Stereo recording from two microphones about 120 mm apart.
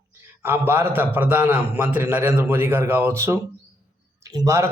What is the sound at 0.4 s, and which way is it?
A man's voice, 20° right (ahead or behind).